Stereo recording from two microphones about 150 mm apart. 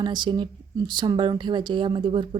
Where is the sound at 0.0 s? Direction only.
30° right (ahead or behind).